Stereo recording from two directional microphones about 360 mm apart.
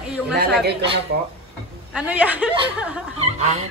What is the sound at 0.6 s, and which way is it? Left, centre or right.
Speech, right.